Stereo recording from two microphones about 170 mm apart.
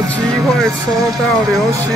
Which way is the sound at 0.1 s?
Centre (ahead or behind).